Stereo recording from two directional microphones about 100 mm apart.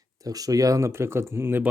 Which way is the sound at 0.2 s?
35° right (ahead or behind).